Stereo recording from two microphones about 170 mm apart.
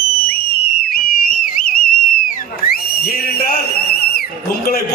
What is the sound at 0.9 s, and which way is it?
Whistle, 60° left (ahead or behind).